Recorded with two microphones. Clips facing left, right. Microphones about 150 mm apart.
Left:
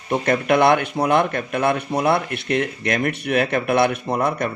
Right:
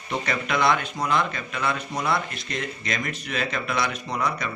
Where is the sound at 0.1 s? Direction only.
55° left (ahead or behind).